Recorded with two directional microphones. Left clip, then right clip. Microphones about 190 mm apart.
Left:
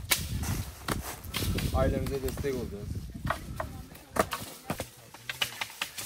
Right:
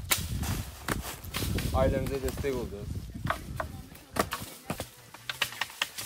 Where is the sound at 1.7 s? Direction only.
15° right (ahead or behind).